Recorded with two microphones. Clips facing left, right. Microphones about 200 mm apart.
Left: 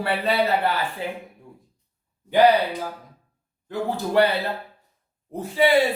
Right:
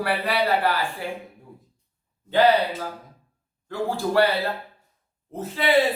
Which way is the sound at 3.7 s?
20° left (ahead or behind).